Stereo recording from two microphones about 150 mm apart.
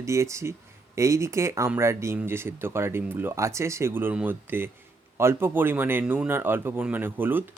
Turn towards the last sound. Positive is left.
turn(degrees=-15)  # may be behind; listen again after turning